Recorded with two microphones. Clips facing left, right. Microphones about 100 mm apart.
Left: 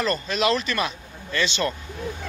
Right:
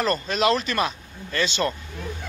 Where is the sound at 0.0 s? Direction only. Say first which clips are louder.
Right 1 dB; 40° right (ahead or behind).